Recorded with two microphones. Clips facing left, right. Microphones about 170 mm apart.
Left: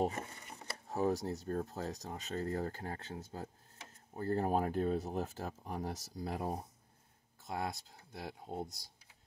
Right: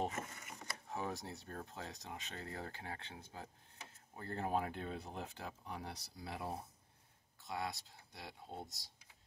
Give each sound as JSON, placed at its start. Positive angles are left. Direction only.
{"t": 0.0, "sound": "speech", "side_deg": 35}